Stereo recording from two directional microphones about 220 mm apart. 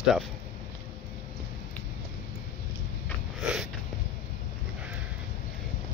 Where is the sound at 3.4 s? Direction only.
5° right (ahead or behind).